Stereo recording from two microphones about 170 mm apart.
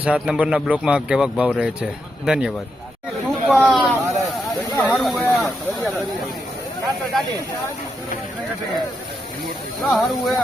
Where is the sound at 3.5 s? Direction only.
5° right (ahead or behind).